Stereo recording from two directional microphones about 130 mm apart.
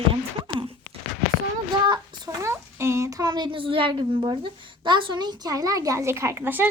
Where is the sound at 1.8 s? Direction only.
30° right (ahead or behind).